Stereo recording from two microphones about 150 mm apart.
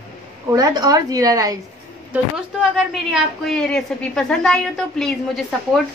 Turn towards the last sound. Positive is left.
turn(degrees=0)  # may be behind; listen again after turning